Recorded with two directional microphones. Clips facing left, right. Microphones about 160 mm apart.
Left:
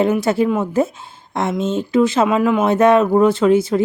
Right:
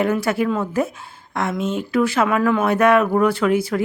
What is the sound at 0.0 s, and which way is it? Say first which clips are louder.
A woman's voice: left 4 dB; 25° left (ahead or behind).